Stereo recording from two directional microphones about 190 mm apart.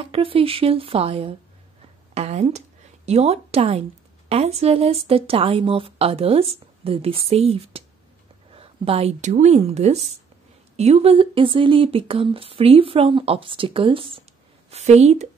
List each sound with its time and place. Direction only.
0.0 s speech: 30° right (ahead or behind)